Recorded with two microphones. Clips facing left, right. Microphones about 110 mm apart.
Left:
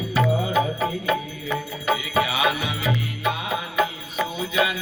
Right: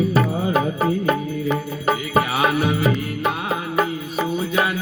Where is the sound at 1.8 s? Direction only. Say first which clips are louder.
Right 3 dB; 45° right (ahead or behind).